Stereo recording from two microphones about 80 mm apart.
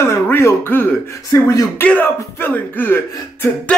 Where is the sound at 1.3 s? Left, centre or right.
Left.